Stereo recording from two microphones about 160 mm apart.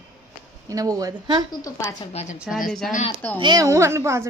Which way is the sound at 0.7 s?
20° right (ahead or behind).